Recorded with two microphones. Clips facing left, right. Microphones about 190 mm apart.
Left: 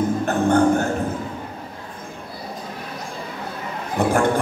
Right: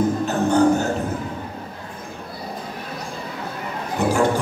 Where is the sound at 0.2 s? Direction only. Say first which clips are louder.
Left 1 dB; 55° left (ahead or behind).